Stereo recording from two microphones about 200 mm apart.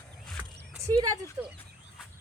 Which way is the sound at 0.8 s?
15° right (ahead or behind).